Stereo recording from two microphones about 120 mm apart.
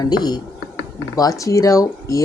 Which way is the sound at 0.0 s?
35° left (ahead or behind).